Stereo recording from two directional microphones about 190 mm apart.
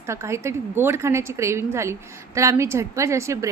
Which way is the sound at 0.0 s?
15° right (ahead or behind).